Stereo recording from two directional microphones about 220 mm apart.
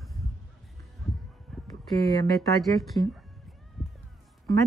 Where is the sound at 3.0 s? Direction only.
25° right (ahead or behind).